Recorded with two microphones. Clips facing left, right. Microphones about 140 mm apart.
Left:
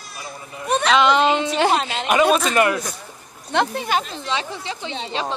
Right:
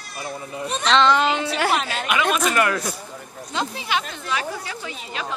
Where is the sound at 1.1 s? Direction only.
20° left (ahead or behind).